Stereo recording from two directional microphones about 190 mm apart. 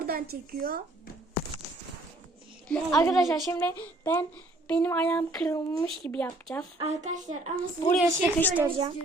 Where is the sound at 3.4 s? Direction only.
15° left (ahead or behind).